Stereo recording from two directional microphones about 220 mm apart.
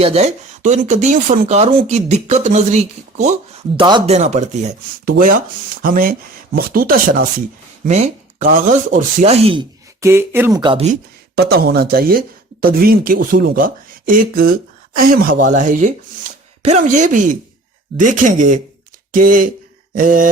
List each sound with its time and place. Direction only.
0.0 s speech: 30° right (ahead or behind)
3.8 s speech: 20° right (ahead or behind)
10.0 s speech: 10° right (ahead or behind)
11.3 s speech: 45° right (ahead or behind)
19.9 s a sound: 40° right (ahead or behind)